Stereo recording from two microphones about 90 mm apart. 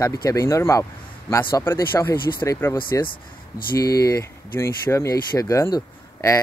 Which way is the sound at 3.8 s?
40° left (ahead or behind).